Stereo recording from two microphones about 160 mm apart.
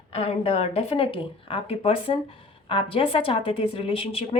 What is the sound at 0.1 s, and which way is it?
A woman's voice, 40° left (ahead or behind).